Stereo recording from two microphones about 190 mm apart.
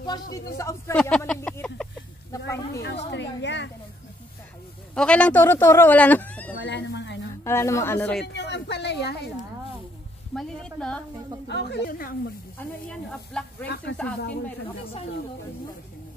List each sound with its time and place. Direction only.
0.0 s speech: 20° left (ahead or behind)
0.9 s speech: 5° left (ahead or behind)
2.3 s a sound: 15° left (ahead or behind)
3.1 s a sound: 65° left (ahead or behind)
4.9 s speech: 5° left (ahead or behind)
6.6 s a sound: 65° left (ahead or behind)
7.4 s speech: 15° left (ahead or behind)
8.3 s a sound: 65° left (ahead or behind)
10.3 s a woman's voice: 5° left (ahead or behind)
11.4 s speech: 65° left (ahead or behind)
11.9 s speech: 50° left (ahead or behind)
12.6 s speech: 10° left (ahead or behind)